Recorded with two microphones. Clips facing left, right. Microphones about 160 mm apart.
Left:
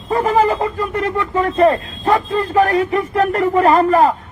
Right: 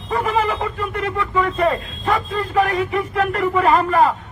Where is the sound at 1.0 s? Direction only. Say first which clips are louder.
Left 2 dB; 40° left (ahead or behind).